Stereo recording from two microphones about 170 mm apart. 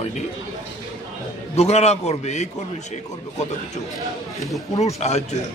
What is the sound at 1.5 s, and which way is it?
Speech, 40° left (ahead or behind).